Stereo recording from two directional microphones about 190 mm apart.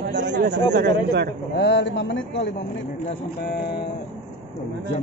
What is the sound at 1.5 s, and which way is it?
A man's voice, 65° left (ahead or behind).